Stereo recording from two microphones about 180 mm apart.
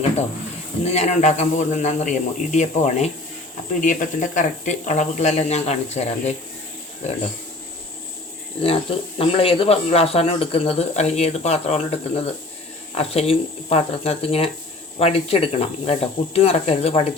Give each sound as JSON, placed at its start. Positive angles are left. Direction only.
{"t": 0.9, "sound": "speech", "side_deg": 40}
{"t": 8.6, "sound": "speech", "side_deg": 30}